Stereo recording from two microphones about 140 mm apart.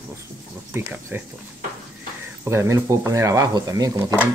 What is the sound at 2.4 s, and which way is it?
Speech, 20° right (ahead or behind).